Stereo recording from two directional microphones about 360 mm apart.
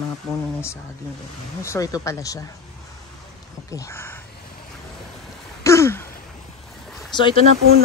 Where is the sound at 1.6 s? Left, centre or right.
Centre.